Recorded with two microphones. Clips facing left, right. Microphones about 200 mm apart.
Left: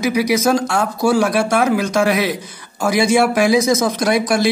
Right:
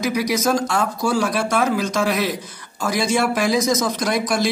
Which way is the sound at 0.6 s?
65° left (ahead or behind).